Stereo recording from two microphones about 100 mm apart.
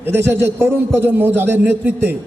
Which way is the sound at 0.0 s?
20° right (ahead or behind).